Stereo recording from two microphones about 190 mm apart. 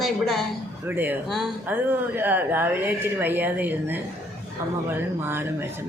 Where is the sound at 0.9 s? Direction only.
10° right (ahead or behind).